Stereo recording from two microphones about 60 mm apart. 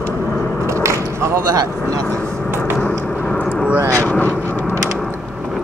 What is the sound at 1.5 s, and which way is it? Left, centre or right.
Speech, right.